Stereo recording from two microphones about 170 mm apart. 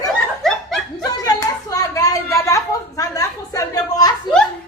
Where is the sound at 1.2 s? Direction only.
20° left (ahead or behind).